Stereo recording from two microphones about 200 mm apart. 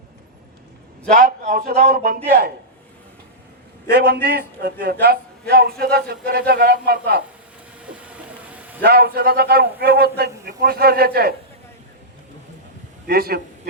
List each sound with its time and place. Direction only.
1.1 s a man's voice: 40° right (ahead or behind)
3.9 s a man's voice: 55° right (ahead or behind)
7.8 s vehicle: 5° right (ahead or behind)
8.8 s a man's voice: 50° right (ahead or behind)
13.1 s a man's voice: 50° right (ahead or behind)